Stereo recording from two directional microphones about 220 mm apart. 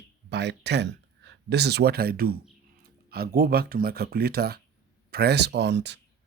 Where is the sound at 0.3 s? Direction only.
50° right (ahead or behind).